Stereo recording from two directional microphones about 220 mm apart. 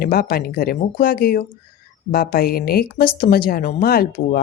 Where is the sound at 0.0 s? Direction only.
45° left (ahead or behind).